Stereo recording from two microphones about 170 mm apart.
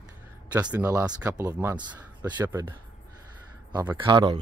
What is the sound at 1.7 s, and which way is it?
Speech, 25° right (ahead or behind).